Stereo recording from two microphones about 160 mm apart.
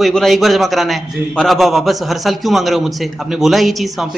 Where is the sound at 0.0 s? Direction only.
Centre (ahead or behind).